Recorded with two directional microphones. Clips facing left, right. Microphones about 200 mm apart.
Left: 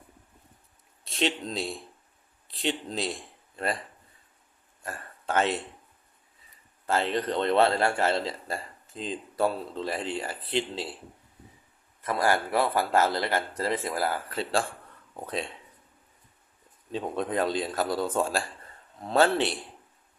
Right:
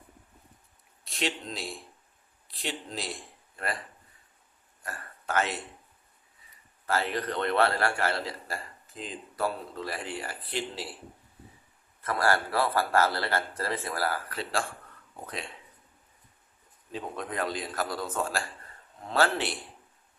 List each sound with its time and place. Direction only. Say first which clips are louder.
1.0 s a man's voice: left 4 dB; 25° left (ahead or behind)
4.8 s a sound: left 2 dB; 25° left (ahead or behind)
6.8 s a man's voice: left 3 dB; 25° left (ahead or behind)
12.0 s a man's voice: left 1 dB; 15° left (ahead or behind)
16.9 s a man's voice: left 6 dB; 25° left (ahead or behind)